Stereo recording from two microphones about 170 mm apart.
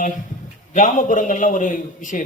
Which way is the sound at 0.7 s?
50° left (ahead or behind).